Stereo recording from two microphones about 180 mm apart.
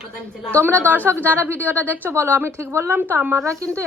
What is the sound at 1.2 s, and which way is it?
Speech, 15° right (ahead or behind).